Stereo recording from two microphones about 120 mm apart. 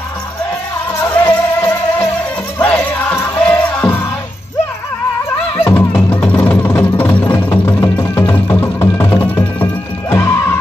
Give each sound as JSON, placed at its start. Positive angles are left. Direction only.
{"t": 1.1, "sound": "music", "side_deg": 20}
{"t": 2.6, "sound": "music", "side_deg": 10}
{"t": 5.6, "sound": "music", "side_deg": 20}